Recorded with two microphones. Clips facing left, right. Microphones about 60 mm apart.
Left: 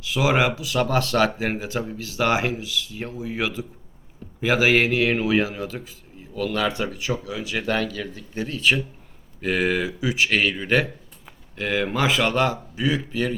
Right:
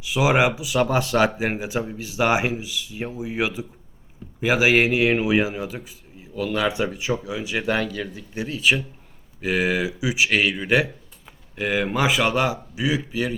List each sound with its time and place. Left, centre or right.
0.0 s a man's voice: centre